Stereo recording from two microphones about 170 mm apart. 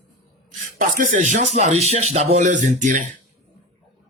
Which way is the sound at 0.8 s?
50° right (ahead or behind).